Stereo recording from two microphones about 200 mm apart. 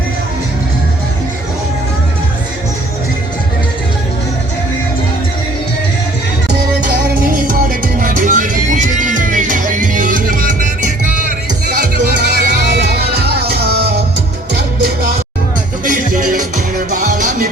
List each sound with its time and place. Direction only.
6.8 s music: 45° right (ahead or behind)
15.8 s music: 40° right (ahead or behind)